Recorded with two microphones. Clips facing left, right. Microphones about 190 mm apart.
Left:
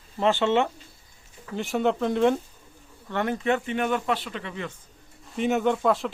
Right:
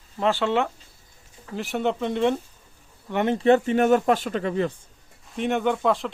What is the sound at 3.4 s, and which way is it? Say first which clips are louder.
Speech: right 11 dB; 35° right (ahead or behind).